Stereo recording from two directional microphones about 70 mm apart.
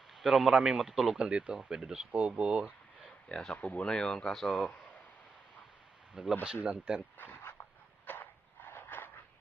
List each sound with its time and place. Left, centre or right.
0.1 s speech: centre
3.2 s speech: centre
6.4 s speech: centre
7.2 s a sound: left